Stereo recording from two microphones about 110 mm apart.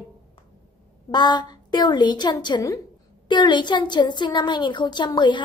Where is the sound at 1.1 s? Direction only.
40° left (ahead or behind).